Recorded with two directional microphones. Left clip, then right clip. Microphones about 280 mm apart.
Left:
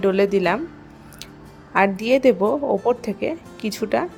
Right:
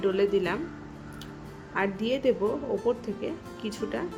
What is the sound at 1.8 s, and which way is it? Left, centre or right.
Speech, left.